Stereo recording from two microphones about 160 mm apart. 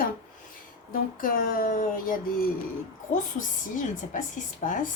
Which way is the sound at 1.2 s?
65° left (ahead or behind).